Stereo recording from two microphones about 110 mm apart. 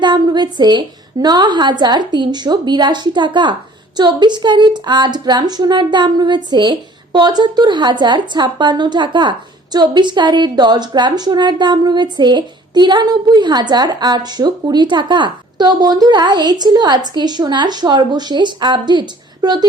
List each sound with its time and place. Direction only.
0.0 s a woman's voice: 40° right (ahead or behind)